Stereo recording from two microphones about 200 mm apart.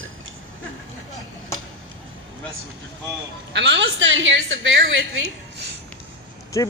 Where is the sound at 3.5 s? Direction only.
60° right (ahead or behind).